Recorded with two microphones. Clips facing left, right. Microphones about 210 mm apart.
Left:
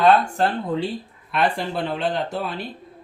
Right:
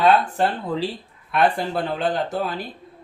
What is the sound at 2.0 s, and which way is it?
Speech, 50° right (ahead or behind).